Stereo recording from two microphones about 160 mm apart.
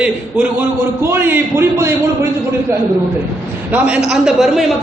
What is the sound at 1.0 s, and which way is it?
Speech, 15° right (ahead or behind).